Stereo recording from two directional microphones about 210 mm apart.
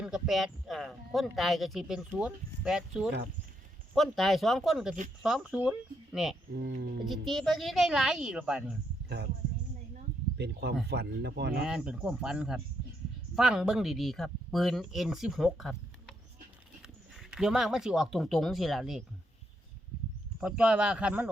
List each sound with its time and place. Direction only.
0.0 s speech: centre (ahead or behind)
6.6 s speech: 50° right (ahead or behind)
7.0 s speech: centre (ahead or behind)
9.0 s a sound: 50° right (ahead or behind)
10.3 s speech: 55° right (ahead or behind)
11.6 s speech: 5° right (ahead or behind)
20.4 s speech: 5° right (ahead or behind)